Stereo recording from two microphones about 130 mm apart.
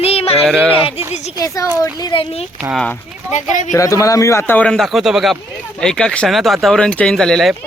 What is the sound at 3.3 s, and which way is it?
Speech, 70° left (ahead or behind).